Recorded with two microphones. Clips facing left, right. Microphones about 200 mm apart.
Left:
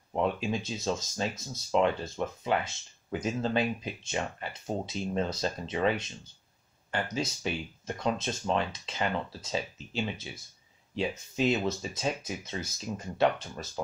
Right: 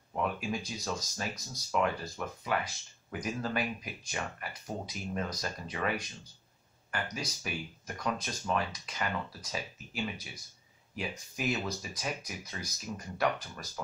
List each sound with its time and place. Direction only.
0.1 s speech: 25° left (ahead or behind)